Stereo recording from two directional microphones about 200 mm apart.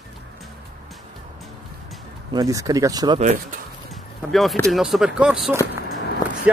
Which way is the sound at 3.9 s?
Centre (ahead or behind).